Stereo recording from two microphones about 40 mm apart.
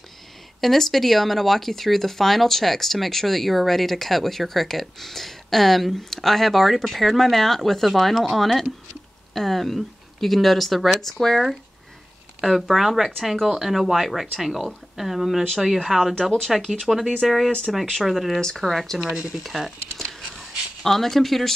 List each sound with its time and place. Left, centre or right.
0.6 s speech: centre
16.2 s speech: centre
18.9 s speech: right
19.4 s speech: centre
20.0 s writing: centre